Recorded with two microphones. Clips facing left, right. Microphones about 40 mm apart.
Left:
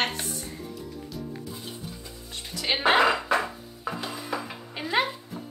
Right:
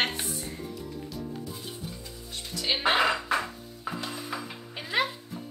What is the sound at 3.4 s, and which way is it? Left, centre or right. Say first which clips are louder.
Music: left 3 dB; centre.